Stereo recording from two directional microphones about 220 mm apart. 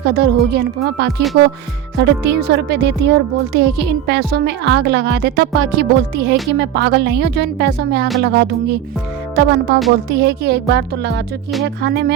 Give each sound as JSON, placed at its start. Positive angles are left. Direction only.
{"t": 0.0, "sound": "speech", "side_deg": -45}
{"t": 9.3, "sound": "music", "side_deg": -50}
{"t": 10.1, "sound": "speech", "side_deg": -50}